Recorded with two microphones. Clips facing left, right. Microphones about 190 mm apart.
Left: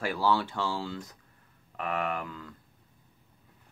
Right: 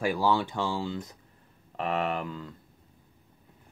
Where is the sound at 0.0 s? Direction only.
15° right (ahead or behind).